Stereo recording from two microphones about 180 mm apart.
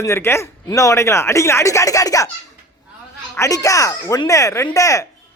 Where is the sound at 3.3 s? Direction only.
20° left (ahead or behind).